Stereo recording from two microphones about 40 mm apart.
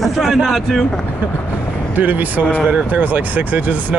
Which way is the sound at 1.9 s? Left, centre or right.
Right.